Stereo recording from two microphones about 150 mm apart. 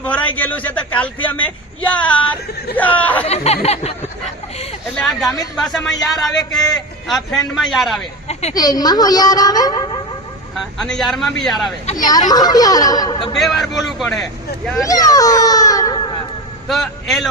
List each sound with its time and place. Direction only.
0.0 s a man's voice: 10° left (ahead or behind)
3.2 s speech: 45° left (ahead or behind)
4.9 s a man's voice: centre (ahead or behind)
8.3 s speech: 45° left (ahead or behind)
8.5 s a woman's voice: 25° left (ahead or behind)
10.5 s a man's voice: 5° left (ahead or behind)
11.9 s speech: 55° left (ahead or behind)
12.3 s a woman's voice: 25° left (ahead or behind)
13.3 s a man's voice: centre (ahead or behind)
14.8 s speech: 25° left (ahead or behind)
16.6 s a man's voice: centre (ahead or behind)